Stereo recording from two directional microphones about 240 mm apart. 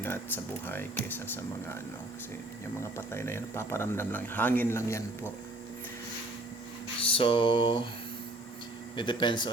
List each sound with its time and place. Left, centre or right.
0.0 s a man's voice: centre
3.1 s a man's voice: centre
7.1 s mantra: left
9.0 s mantra: centre